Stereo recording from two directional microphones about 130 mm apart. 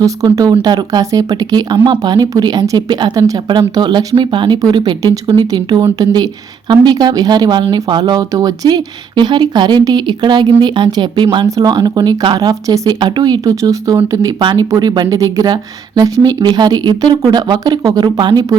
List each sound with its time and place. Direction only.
0.0 s speech: 25° right (ahead or behind)